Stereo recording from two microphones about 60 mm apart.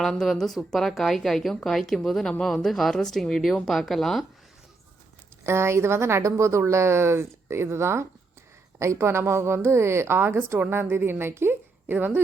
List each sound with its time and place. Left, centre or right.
0.0 s speech: centre
5.4 s a woman's voice: right